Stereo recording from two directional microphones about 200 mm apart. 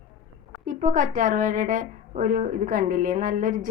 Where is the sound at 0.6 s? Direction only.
40° right (ahead or behind).